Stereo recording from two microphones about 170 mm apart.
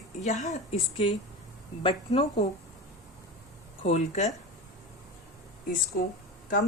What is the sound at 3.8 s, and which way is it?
Speech, 40° left (ahead or behind).